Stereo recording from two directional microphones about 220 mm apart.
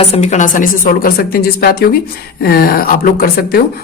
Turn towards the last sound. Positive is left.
turn(degrees=40)  # may be behind; listen again after turning